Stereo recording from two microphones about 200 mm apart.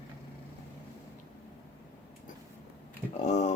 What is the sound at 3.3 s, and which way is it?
Speech, 35° left (ahead or behind).